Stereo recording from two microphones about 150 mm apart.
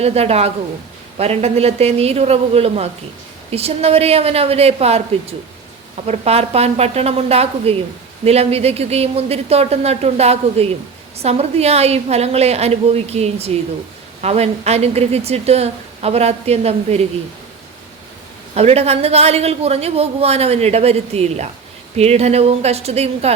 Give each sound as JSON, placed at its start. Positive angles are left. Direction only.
{"t": 0.0, "sound": "a woman's voice", "side_deg": -45}
{"t": 6.1, "sound": "a woman's voice", "side_deg": -45}
{"t": 18.5, "sound": "a woman's voice", "side_deg": -45}